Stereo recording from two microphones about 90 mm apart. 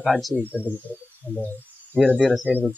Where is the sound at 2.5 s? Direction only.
15° left (ahead or behind).